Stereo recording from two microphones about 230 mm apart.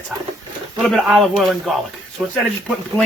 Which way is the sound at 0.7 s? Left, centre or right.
Centre.